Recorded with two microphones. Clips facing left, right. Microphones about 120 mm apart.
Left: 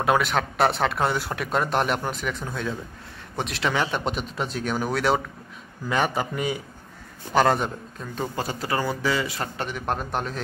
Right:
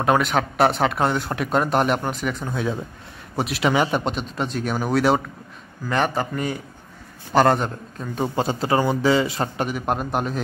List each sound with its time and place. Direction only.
0.0 s a man's voice: centre (ahead or behind)
4.0 s speech: 5° left (ahead or behind)
8.2 s a man's voice: 25° right (ahead or behind)
9.6 s a man's voice: 10° right (ahead or behind)